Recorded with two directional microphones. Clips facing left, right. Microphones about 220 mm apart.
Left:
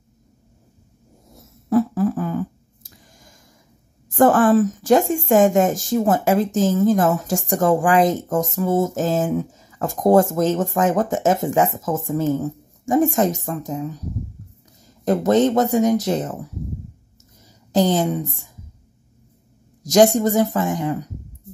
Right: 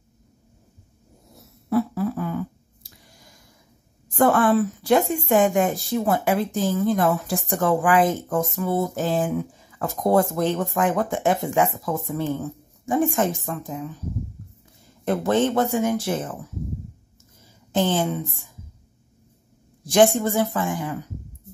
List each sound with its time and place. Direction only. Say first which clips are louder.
1.3 s fart: left 4 dB; 45° left (ahead or behind)
4.1 s a woman's voice: left 4 dB; 45° left (ahead or behind)
15.0 s speech: left 4 dB; 40° left (ahead or behind)
17.7 s speech: left 4 dB; 40° left (ahead or behind)
19.8 s speech: left 3 dB; 40° left (ahead or behind)